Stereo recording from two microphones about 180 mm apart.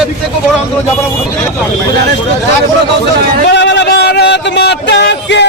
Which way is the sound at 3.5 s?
70° left (ahead or behind).